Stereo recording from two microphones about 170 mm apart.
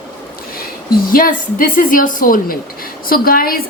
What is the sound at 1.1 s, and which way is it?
A woman's voice, 55° left (ahead or behind).